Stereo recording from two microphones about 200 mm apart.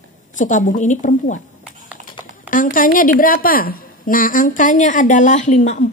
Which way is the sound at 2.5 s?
45° left (ahead or behind).